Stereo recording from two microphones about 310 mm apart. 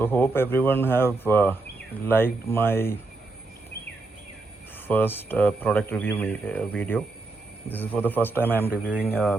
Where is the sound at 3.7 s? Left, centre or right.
Left.